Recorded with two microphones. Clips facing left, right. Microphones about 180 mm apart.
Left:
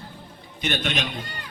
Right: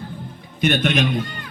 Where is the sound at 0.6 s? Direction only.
55° right (ahead or behind).